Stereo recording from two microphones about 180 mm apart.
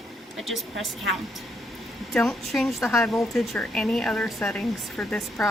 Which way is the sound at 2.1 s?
Centre (ahead or behind).